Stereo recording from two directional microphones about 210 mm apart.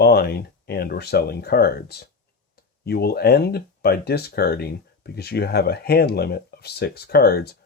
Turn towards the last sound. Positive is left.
turn(degrees=50)  # may be behind; listen again after turning